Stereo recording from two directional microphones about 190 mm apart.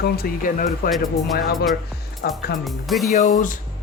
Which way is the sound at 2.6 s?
Centre (ahead or behind).